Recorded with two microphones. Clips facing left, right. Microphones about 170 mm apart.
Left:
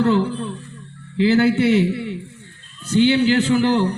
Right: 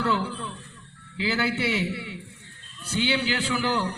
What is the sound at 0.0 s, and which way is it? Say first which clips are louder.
A man's voice: left 9 dB; 40° left (ahead or behind).